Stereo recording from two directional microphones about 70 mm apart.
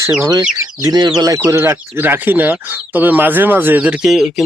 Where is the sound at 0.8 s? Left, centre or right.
Right.